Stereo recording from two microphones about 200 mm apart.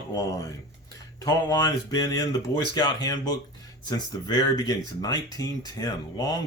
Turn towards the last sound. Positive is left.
turn(degrees=15)  # may be behind; listen again after turning